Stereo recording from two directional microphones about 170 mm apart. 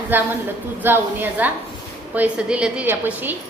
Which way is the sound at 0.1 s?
10° right (ahead or behind).